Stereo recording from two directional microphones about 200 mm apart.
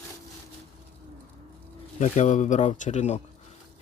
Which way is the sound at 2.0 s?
40° left (ahead or behind).